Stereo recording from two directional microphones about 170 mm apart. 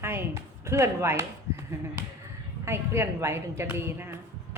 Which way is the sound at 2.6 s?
15° right (ahead or behind).